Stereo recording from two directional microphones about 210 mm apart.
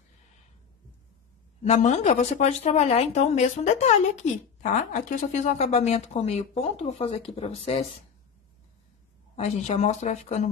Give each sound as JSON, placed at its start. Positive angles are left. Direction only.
{"t": 1.6, "sound": "speech", "side_deg": 35}
{"t": 9.4, "sound": "speech", "side_deg": 30}